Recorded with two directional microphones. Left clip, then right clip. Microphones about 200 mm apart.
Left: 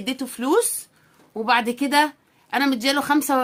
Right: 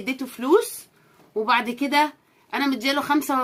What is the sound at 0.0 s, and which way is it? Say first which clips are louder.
Speech: left 1 dB; 45° left (ahead or behind).